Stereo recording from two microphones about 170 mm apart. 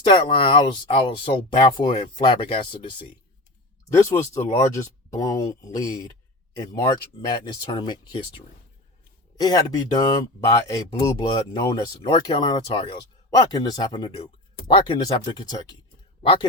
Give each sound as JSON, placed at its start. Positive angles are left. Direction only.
{"t": 0.1, "sound": "speech", "side_deg": 30}
{"t": 3.8, "sound": "speech", "side_deg": 15}
{"t": 9.4, "sound": "speech", "side_deg": 25}